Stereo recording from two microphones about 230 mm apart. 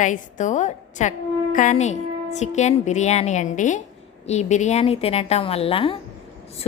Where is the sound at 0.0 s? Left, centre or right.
Left.